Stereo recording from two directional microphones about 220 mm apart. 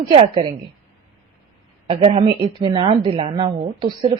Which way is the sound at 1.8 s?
25° right (ahead or behind).